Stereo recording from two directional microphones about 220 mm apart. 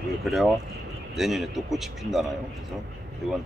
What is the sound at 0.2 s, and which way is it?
Speech, centre (ahead or behind).